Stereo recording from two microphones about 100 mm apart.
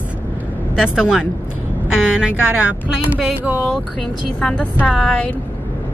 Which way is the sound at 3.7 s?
10° left (ahead or behind).